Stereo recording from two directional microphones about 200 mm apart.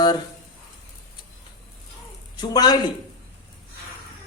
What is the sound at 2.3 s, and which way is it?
Speech, 20° left (ahead or behind).